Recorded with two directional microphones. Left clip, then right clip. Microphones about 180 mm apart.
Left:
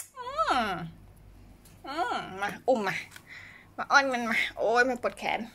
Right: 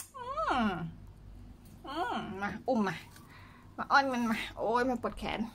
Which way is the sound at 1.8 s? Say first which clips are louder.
Left 4 dB; 5° right (ahead or behind).